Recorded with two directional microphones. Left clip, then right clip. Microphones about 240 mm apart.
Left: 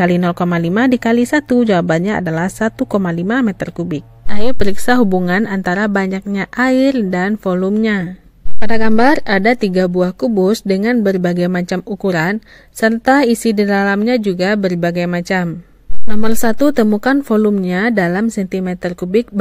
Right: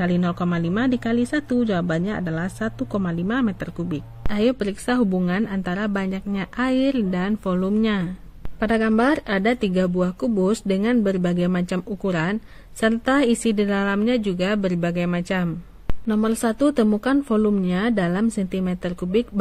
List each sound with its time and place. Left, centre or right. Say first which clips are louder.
0.0 s a woman's voice: left 9 dB; left